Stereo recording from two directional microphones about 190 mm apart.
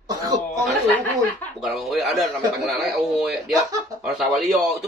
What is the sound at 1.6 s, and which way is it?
A man's voice, centre (ahead or behind).